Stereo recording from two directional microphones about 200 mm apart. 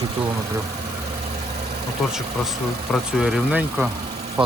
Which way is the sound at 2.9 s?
Centre (ahead or behind).